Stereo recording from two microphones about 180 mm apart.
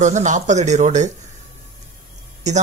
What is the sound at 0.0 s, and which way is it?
Speech, 40° right (ahead or behind).